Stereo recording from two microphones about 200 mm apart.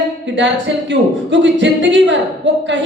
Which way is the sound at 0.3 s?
65° right (ahead or behind).